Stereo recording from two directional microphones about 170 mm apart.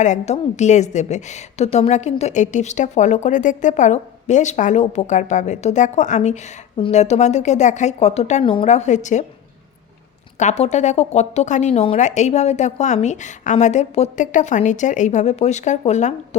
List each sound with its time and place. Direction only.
0.0 s a woman's voice: 45° left (ahead or behind)
10.3 s a woman's voice: 40° left (ahead or behind)